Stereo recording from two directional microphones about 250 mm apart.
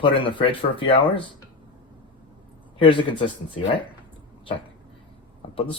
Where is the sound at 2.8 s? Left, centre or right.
Left.